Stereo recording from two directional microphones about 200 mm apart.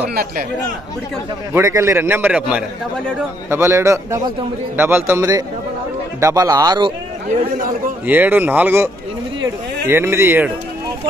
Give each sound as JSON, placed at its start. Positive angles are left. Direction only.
{"t": 0.1, "sound": "speech", "side_deg": -50}
{"t": 1.5, "sound": "a man's voice", "side_deg": -15}
{"t": 8.1, "sound": "a man's voice", "side_deg": -10}